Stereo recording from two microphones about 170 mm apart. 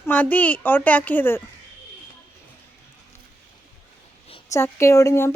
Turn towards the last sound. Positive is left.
turn(degrees=15)  # may be behind; listen again after turning